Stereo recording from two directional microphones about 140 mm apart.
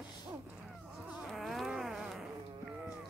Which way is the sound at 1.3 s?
Centre (ahead or behind).